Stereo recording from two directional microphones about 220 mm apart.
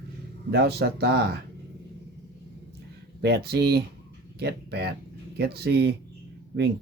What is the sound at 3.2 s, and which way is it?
Speech, 45° right (ahead or behind).